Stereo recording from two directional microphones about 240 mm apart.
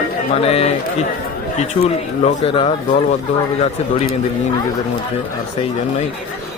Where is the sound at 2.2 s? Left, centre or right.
Left.